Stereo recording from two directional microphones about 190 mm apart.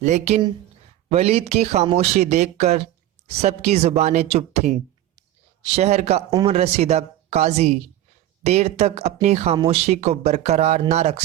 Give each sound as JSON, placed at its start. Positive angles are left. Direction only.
{"t": 0.0, "sound": "speech", "side_deg": -40}